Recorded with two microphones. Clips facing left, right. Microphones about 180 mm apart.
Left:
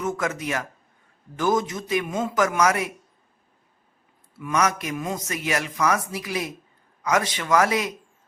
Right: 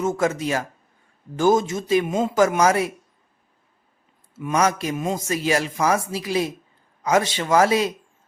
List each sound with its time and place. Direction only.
0.0 s a man's voice: 30° right (ahead or behind)
4.4 s a man's voice: 25° right (ahead or behind)